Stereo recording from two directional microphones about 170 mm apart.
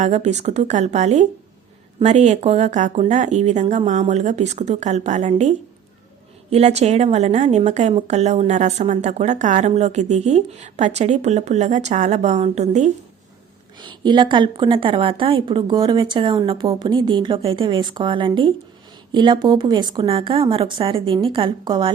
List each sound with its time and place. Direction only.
0.0 s a woman's voice: 40° right (ahead or behind)
13.7 s a woman's voice: 25° right (ahead or behind)